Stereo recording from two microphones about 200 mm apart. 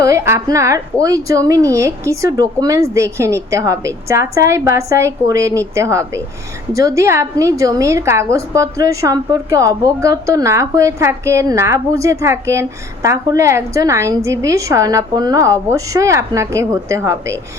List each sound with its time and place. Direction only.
0.0 s a woman's voice: 15° right (ahead or behind)